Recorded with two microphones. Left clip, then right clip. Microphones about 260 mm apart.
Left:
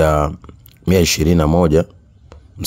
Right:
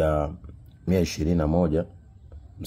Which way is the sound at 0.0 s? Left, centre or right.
Left.